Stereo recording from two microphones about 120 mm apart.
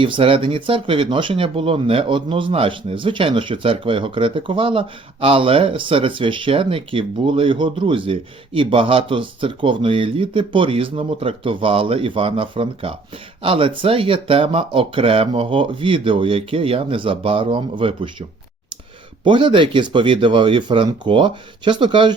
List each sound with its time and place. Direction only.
0.0 s speech: 45° right (ahead or behind)
19.2 s speech: 45° right (ahead or behind)